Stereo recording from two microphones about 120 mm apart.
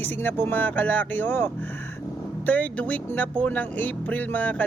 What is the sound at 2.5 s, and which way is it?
Speech, 10° left (ahead or behind).